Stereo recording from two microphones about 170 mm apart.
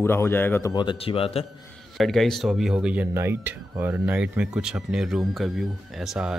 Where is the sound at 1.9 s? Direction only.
Centre (ahead or behind).